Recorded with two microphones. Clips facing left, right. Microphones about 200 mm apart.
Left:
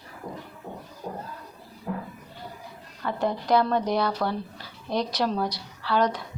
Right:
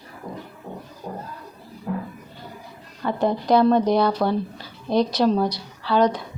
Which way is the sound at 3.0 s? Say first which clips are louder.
Right 4 dB; 25° right (ahead or behind).